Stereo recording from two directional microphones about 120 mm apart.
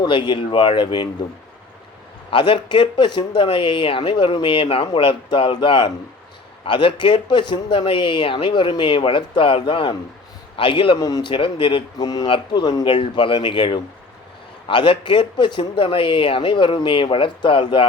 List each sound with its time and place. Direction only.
0.0 s speech: 40° left (ahead or behind)
2.3 s speech: 40° left (ahead or behind)
10.9 s a man's voice: 30° left (ahead or behind)